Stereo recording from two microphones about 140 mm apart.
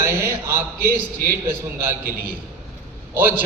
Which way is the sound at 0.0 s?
20° right (ahead or behind).